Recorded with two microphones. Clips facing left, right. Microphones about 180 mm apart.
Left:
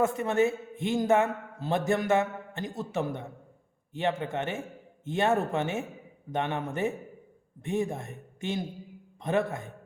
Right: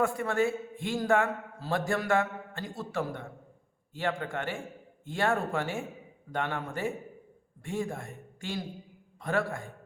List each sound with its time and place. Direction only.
0.0 s a man's voice: 20° left (ahead or behind)